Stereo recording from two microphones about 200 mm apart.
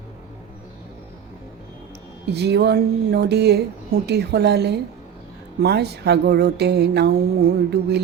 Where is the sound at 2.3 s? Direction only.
55° right (ahead or behind).